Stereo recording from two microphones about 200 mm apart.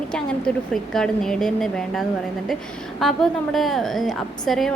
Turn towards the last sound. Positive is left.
turn(degrees=0)  # may be behind; listen again after turning